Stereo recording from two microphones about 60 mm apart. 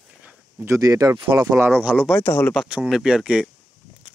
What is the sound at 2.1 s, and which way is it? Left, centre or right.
Speech, left.